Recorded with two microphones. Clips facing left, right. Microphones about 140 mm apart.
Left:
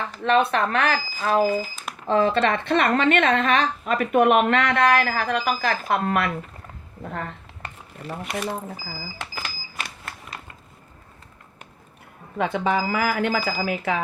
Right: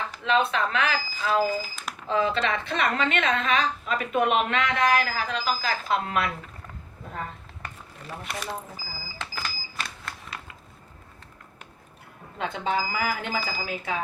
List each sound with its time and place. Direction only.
0.2 s speech: 55° left (ahead or behind)
12.4 s speech: 60° left (ahead or behind)